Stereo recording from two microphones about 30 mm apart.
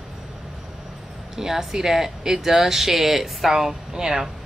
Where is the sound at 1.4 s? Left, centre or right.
Centre.